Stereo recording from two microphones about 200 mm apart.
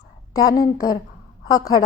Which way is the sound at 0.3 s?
15° left (ahead or behind).